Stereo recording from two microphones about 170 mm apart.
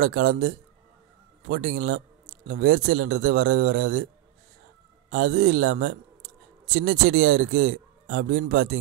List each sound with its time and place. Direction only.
0.0 s speech: 50° right (ahead or behind)
5.1 s speech: 50° right (ahead or behind)